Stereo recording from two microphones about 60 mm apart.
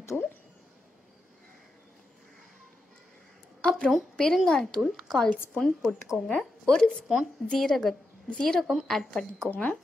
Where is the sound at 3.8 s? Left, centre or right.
Centre.